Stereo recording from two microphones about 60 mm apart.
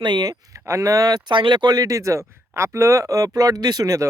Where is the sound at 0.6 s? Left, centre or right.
Right.